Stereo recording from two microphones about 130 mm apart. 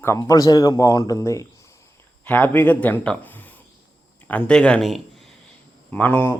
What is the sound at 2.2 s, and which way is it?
Speech, 15° left (ahead or behind).